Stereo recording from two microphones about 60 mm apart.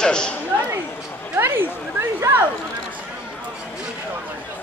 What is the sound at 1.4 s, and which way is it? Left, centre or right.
Speech, right.